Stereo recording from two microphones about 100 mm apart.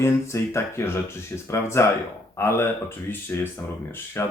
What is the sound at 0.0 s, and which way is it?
Speech, 25° left (ahead or behind).